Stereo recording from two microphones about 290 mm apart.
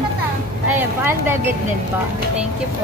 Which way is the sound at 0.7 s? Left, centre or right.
Centre.